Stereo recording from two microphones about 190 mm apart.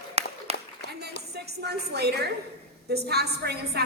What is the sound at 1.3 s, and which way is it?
A woman's voice, 60° right (ahead or behind).